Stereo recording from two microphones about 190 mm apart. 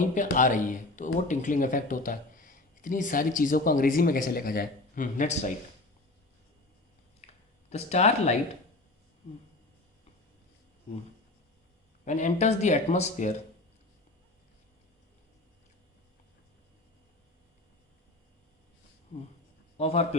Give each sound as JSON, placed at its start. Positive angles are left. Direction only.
{"t": 0.0, "sound": "speech", "side_deg": 40}
{"t": 7.7, "sound": "speech", "side_deg": 35}
{"t": 12.0, "sound": "speech", "side_deg": 40}
{"t": 19.7, "sound": "a man's voice", "side_deg": 35}